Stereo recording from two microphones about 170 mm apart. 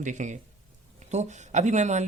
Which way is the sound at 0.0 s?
45° right (ahead or behind).